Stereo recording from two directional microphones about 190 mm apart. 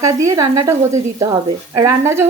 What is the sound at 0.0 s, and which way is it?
Speech, 15° right (ahead or behind).